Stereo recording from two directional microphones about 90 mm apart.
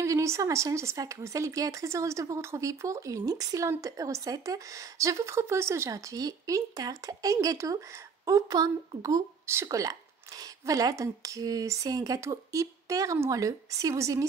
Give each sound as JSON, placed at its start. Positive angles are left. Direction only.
{"t": 0.0, "sound": "speech", "side_deg": -35}